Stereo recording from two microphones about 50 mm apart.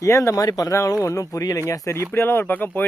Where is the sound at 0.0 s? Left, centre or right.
Left.